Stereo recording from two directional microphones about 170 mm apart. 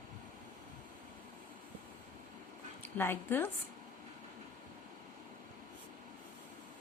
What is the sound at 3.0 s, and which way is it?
Speech, 15° left (ahead or behind).